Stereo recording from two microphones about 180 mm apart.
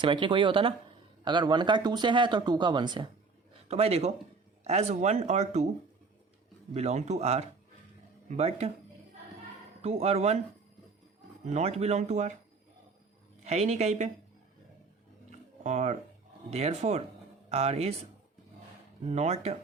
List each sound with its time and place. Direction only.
0.0 s speech: 25° right (ahead or behind)
3.7 s speech: 35° right (ahead or behind)
6.7 s speech: 40° right (ahead or behind)
9.8 s speech: 35° right (ahead or behind)
11.4 s speech: 35° right (ahead or behind)
13.4 s speech: 40° right (ahead or behind)
15.6 s speech: 40° right (ahead or behind)
19.0 s speech: 35° right (ahead or behind)